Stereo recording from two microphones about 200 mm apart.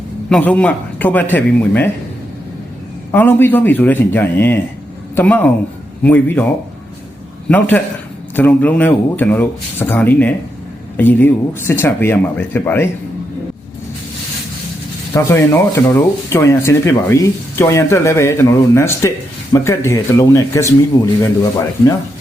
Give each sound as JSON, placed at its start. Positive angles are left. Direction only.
{"t": 0.3, "sound": "speech", "side_deg": 5}
{"t": 3.1, "sound": "speech", "side_deg": 10}
{"t": 7.4, "sound": "a man's voice", "side_deg": 10}
{"t": 15.1, "sound": "speech", "side_deg": 15}